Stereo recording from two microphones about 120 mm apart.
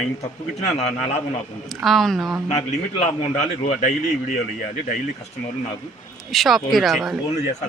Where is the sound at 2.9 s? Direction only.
65° left (ahead or behind).